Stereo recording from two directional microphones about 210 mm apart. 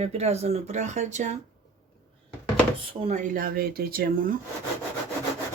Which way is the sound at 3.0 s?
35° right (ahead or behind).